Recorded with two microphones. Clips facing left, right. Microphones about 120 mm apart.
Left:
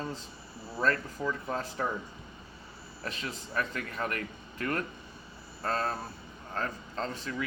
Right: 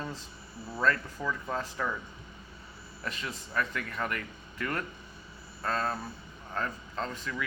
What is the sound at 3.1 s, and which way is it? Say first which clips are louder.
Speech: right 1 dB; 35° left (ahead or behind).